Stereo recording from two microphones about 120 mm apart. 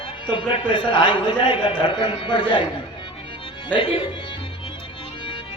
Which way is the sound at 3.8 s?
40° left (ahead or behind).